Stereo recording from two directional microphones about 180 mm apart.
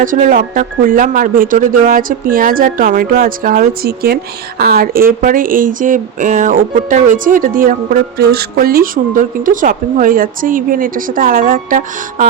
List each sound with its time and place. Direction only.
0.0 s speech: 50° right (ahead or behind)